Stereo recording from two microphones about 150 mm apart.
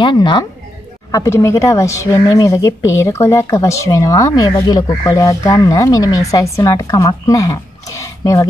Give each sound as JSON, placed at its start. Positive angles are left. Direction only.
{"t": 0.0, "sound": "a woman's voice", "side_deg": 30}
{"t": 1.1, "sound": "speech", "side_deg": 20}